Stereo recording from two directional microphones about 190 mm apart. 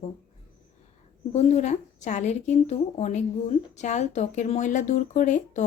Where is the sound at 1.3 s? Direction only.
35° left (ahead or behind).